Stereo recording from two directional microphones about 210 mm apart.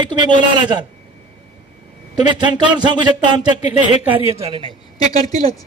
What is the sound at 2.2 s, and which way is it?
A man's voice, 20° right (ahead or behind).